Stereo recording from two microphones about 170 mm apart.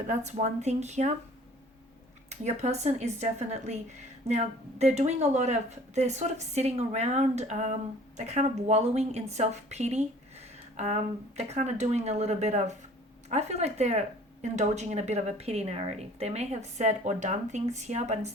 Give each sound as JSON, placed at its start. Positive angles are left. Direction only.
{"t": 0.1, "sound": "speech", "side_deg": -40}
{"t": 2.3, "sound": "speech", "side_deg": -40}